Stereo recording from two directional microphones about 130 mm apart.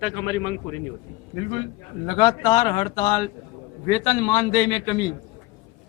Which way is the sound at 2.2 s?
30° left (ahead or behind).